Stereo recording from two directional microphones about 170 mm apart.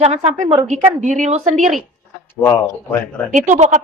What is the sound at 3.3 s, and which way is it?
Speech, 45° right (ahead or behind).